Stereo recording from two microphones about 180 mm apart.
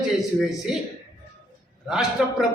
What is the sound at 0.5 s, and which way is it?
Speech, centre (ahead or behind).